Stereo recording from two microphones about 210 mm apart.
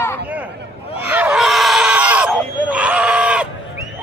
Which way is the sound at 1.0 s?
5° right (ahead or behind).